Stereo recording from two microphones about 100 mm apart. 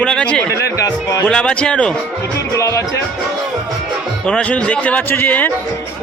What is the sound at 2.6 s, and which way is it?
Music, 30° left (ahead or behind).